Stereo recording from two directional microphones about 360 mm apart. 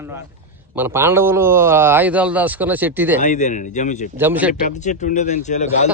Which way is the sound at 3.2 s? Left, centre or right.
Centre.